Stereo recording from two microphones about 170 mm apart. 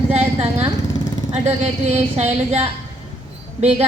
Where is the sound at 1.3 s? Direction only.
40° right (ahead or behind).